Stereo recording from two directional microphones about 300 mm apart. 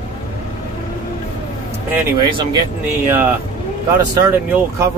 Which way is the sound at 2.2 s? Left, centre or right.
Centre.